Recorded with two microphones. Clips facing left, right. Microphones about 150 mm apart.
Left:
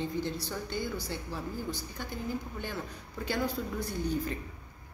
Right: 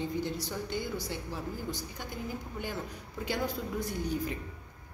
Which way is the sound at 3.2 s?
20° right (ahead or behind).